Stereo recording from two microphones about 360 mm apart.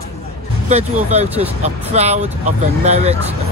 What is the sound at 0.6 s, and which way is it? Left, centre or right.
Speech, centre.